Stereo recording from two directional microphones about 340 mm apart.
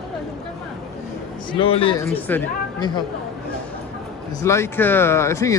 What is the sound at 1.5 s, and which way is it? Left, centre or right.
Speech, centre.